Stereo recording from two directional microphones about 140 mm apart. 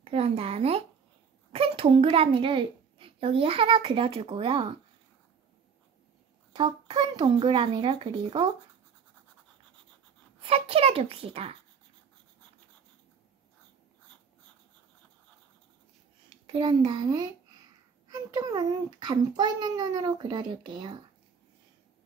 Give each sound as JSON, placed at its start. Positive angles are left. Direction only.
{"t": 0.0, "sound": "a child's voice", "side_deg": -45}
{"t": 6.5, "sound": "a child's voice", "side_deg": -35}
{"t": 10.4, "sound": "a child's voice", "side_deg": -45}
{"t": 16.3, "sound": "a sound", "side_deg": -35}
{"t": 18.0, "sound": "a child's voice", "side_deg": -25}